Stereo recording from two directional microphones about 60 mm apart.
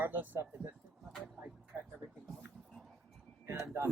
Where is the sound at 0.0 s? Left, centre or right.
Right.